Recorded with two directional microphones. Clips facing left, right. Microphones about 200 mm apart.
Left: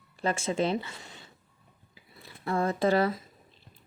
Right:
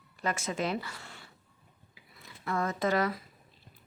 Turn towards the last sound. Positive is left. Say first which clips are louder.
# left 4 dB
turn(degrees=30)  # may be behind; listen again after turning